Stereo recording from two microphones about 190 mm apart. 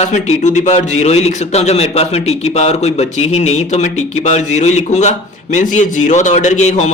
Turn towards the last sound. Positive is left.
turn(degrees=40)  # may be behind; listen again after turning